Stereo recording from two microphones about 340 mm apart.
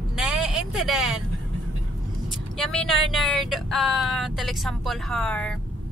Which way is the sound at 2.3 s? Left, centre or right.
Centre.